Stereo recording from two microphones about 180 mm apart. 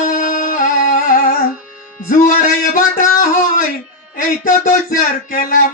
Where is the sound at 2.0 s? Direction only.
50° left (ahead or behind).